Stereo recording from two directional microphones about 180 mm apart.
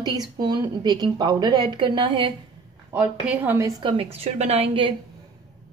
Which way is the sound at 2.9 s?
10° right (ahead or behind).